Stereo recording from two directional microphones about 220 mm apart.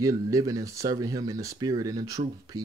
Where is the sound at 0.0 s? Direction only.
15° right (ahead or behind).